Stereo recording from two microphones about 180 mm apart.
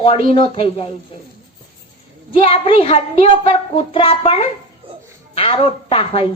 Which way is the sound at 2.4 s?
30° left (ahead or behind).